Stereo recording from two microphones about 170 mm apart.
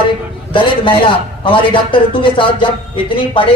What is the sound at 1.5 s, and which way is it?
A man's voice, 30° left (ahead or behind).